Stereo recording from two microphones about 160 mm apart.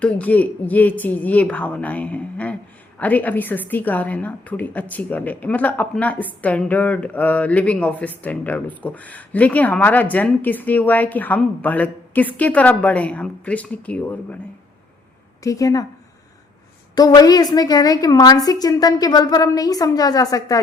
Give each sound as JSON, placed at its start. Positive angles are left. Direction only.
{"t": 0.0, "sound": "a woman's voice", "side_deg": 10}
{"t": 15.4, "sound": "a woman's voice", "side_deg": 20}
{"t": 16.9, "sound": "a woman's voice", "side_deg": 25}